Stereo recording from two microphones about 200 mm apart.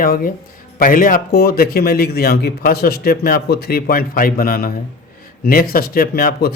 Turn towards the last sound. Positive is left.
turn(degrees=50)  # may be behind; listen again after turning